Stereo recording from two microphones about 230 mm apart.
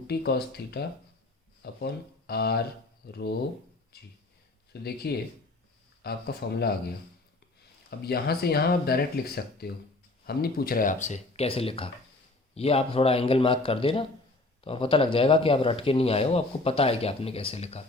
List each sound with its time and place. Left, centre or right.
0.1 s speech: left
4.7 s speech: left